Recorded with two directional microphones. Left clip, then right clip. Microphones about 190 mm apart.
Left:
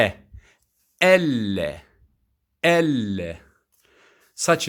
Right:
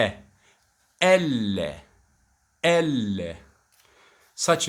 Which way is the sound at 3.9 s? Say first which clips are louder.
Even; 35° left (ahead or behind).